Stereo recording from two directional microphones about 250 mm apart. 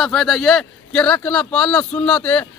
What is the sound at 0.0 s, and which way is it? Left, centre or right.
A man's voice, centre.